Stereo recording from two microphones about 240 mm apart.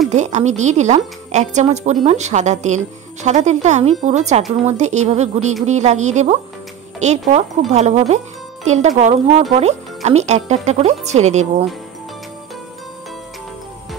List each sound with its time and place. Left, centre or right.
0.1 s speech: right